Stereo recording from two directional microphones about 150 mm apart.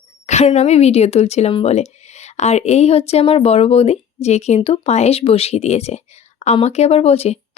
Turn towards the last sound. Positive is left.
turn(degrees=45)  # may be behind; listen again after turning